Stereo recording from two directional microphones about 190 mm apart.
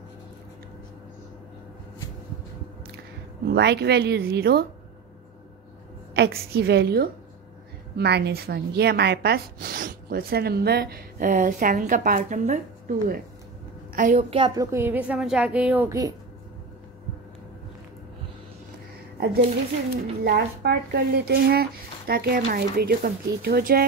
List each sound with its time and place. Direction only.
3.4 s speech: 60° right (ahead or behind)
6.1 s a woman's voice: 55° right (ahead or behind)
14.3 s a woman's voice: 25° right (ahead or behind)
19.1 s a sound: 60° right (ahead or behind)
20.2 s speech: 55° right (ahead or behind)